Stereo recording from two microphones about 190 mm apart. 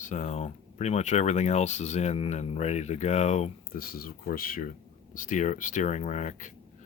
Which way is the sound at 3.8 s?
50° left (ahead or behind).